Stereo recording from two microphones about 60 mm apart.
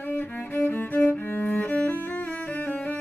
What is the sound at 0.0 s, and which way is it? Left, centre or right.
Music, left.